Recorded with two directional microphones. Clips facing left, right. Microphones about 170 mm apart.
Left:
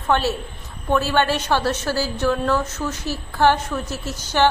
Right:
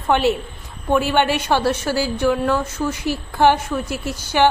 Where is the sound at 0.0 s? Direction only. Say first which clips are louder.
Right 3 dB; 15° right (ahead or behind).